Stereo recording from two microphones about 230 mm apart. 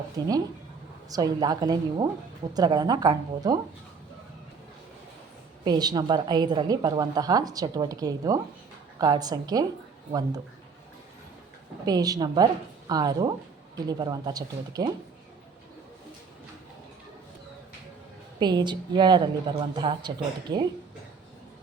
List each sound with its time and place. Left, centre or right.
1.1 s a woman's voice: centre
5.6 s a woman's voice: centre
11.9 s a woman's voice: centre
18.3 s a woman's voice: centre